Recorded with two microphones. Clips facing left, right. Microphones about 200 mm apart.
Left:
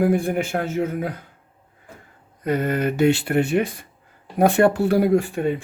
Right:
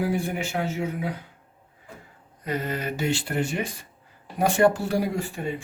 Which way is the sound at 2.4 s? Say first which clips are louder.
Left 7 dB; 55° left (ahead or behind).